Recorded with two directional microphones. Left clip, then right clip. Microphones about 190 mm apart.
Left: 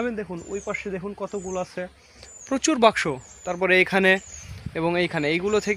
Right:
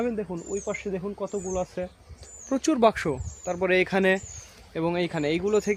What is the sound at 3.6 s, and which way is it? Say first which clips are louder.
Speech: left 4 dB; 20° left (ahead or behind).